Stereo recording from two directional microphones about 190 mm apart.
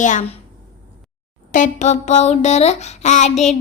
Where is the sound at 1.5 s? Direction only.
40° left (ahead or behind).